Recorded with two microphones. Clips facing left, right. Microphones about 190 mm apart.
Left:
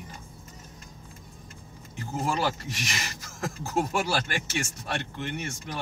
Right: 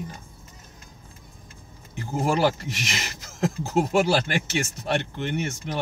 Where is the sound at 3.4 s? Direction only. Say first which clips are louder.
Right 5 dB; 20° right (ahead or behind).